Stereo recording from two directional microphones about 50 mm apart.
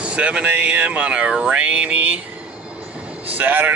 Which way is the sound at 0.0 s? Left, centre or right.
Right.